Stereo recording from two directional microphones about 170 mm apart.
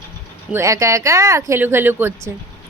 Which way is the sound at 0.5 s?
20° right (ahead or behind).